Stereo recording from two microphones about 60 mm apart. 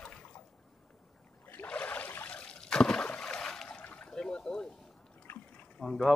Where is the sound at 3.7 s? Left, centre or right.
Left.